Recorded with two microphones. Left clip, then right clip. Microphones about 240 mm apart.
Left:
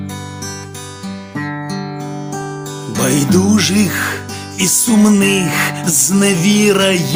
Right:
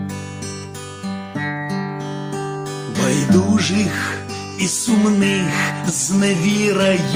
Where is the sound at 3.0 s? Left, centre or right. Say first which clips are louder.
Left 3 dB; left.